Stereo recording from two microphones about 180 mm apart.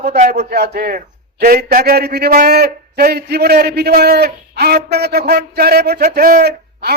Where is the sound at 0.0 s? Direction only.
55° right (ahead or behind).